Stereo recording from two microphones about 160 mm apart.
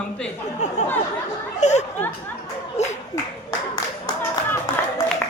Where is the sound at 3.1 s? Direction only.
25° left (ahead or behind).